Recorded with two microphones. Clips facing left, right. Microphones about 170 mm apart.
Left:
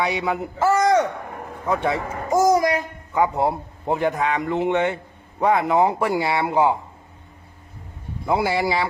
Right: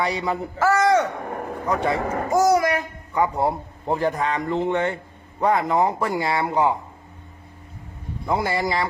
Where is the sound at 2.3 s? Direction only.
15° left (ahead or behind).